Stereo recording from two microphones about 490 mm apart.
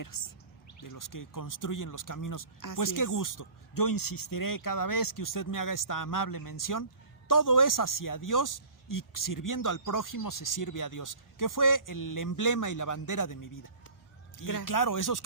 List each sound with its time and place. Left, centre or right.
0.0 s speech: left